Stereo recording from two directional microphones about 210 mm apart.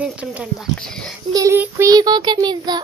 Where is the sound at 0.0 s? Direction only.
5° right (ahead or behind).